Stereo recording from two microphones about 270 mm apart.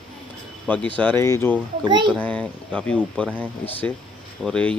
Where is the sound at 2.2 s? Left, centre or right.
Centre.